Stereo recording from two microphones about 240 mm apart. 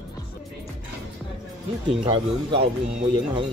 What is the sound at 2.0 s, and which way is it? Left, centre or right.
Speech, right.